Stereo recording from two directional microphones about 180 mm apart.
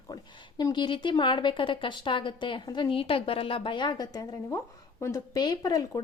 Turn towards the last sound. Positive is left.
turn(degrees=20)  # may be behind; listen again after turning